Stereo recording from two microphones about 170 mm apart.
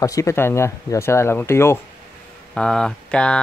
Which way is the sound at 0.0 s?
20° left (ahead or behind).